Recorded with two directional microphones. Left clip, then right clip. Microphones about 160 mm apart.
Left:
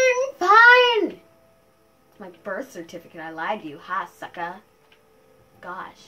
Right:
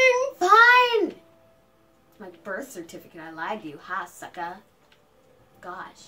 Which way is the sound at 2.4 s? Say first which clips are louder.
Left 3 dB; 45° left (ahead or behind).